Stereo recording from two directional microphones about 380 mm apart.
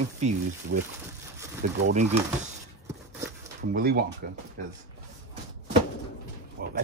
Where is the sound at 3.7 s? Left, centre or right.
Right.